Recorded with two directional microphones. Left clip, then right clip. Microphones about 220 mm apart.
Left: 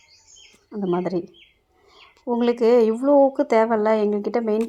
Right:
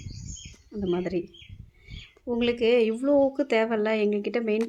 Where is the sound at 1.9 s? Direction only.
10° left (ahead or behind).